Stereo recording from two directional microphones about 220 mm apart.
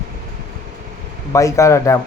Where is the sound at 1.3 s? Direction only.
15° left (ahead or behind).